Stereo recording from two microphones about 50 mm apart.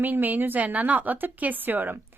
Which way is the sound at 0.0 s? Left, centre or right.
Right.